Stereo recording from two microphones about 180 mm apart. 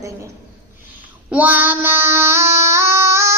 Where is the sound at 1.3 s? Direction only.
10° right (ahead or behind).